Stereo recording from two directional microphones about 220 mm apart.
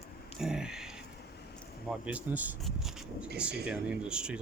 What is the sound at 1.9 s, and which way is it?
Speech, 5° right (ahead or behind).